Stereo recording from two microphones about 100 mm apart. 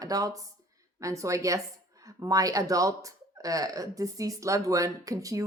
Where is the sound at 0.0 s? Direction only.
35° right (ahead or behind).